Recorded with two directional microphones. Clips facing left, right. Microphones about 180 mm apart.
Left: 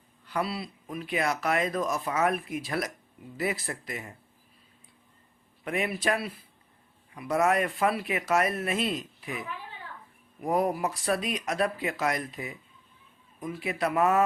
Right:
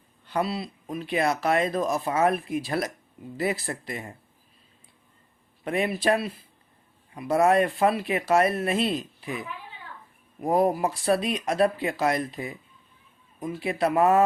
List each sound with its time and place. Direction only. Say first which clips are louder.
0.3 s speech: right 4 dB; 25° right (ahead or behind)
5.6 s speech: right 4 dB; 30° right (ahead or behind)
10.4 s speech: right 4 dB; 30° right (ahead or behind)